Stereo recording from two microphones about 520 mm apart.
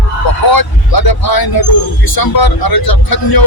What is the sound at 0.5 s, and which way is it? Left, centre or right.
A man's voice, left.